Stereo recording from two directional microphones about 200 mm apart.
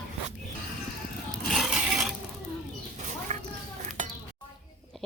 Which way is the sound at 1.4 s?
Centre (ahead or behind).